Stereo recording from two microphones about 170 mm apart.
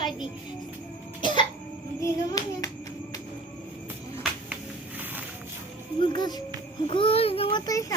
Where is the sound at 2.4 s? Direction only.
20° left (ahead or behind).